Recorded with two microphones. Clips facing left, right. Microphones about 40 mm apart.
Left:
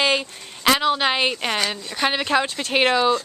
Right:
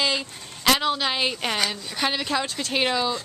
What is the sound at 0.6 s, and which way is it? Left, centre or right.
Speech, centre.